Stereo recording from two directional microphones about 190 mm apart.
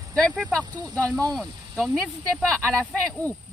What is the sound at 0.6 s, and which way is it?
Speech, 20° right (ahead or behind).